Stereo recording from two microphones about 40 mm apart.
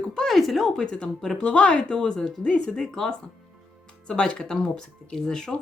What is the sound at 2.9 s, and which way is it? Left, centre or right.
Speech, centre.